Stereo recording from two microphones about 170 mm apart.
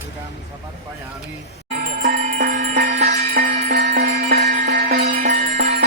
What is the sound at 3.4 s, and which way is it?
Music, 65° right (ahead or behind).